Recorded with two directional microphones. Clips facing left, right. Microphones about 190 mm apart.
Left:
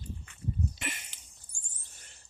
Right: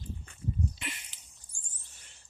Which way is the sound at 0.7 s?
45° left (ahead or behind).